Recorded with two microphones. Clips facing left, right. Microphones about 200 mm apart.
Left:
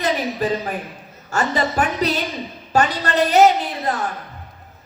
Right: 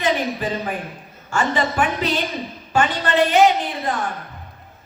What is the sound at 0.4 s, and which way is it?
A woman's voice, 40° left (ahead or behind).